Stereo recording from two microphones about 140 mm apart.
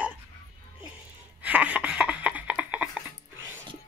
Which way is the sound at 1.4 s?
10° right (ahead or behind).